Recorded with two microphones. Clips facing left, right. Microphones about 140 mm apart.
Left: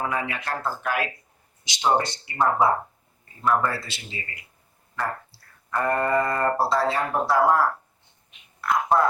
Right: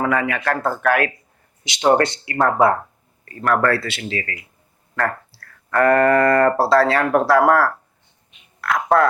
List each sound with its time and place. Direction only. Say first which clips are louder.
0.0 s speech: right 8 dB; 75° right (ahead or behind)
1.6 s a man's voice: right 7 dB; 70° right (ahead or behind)
8.6 s a sound: right 4 dB; 80° right